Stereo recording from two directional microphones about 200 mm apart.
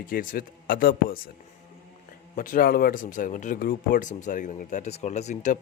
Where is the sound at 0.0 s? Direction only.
45° left (ahead or behind).